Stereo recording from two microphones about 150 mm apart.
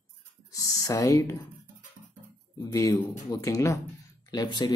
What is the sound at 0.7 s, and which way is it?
Speech, 20° left (ahead or behind).